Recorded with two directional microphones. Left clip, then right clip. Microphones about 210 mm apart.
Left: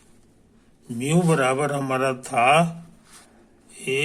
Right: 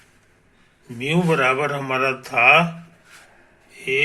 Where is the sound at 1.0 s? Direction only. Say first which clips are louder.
Right 2 dB; 25° left (ahead or behind).